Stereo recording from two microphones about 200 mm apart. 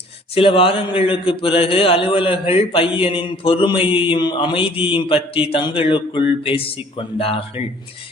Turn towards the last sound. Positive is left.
turn(degrees=30)  # may be behind; listen again after turning